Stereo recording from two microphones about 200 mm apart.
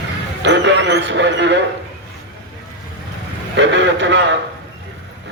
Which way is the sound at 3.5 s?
65° right (ahead or behind).